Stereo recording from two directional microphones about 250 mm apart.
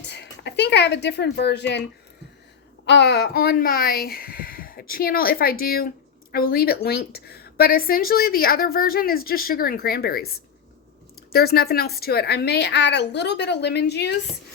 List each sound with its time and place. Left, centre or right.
0.1 s speech: left
2.8 s a woman's voice: left